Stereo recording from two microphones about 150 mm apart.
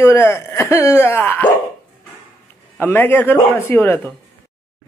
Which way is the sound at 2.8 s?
15° left (ahead or behind).